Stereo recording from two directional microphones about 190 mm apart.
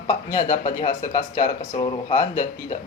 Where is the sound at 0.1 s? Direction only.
20° left (ahead or behind).